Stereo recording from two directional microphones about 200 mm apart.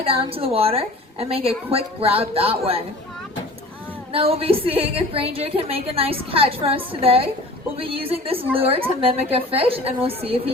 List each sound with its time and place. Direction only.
0.0 s a woman's voice: 30° right (ahead or behind)
4.1 s a woman's voice: 30° right (ahead or behind)